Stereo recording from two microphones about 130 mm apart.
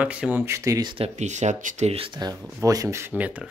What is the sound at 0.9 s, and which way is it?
Speech, 55° right (ahead or behind).